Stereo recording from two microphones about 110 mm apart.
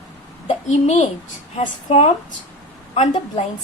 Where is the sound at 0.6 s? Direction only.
90° left.